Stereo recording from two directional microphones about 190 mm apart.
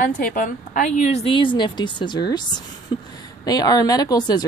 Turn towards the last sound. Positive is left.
turn(degrees=20)  # may be behind; listen again after turning